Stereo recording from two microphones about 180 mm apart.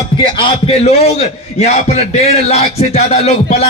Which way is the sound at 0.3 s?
35° left (ahead or behind).